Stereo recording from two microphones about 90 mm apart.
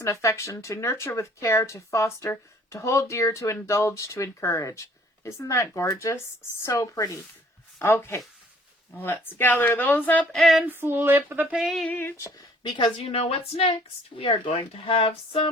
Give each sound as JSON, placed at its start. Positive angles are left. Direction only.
{"t": 0.0, "sound": "speech", "side_deg": 35}
{"t": 7.8, "sound": "speech", "side_deg": 25}
{"t": 10.3, "sound": "female singing", "side_deg": 0}
{"t": 10.7, "sound": "speech", "side_deg": -25}
{"t": 11.5, "sound": "female singing", "side_deg": -5}
{"t": 11.9, "sound": "speech", "side_deg": 25}
{"t": 12.6, "sound": "speech", "side_deg": 60}